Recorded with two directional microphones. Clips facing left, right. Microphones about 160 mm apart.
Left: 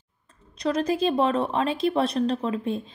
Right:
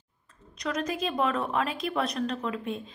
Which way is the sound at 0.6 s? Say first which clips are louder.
Left 7 dB; 30° left (ahead or behind).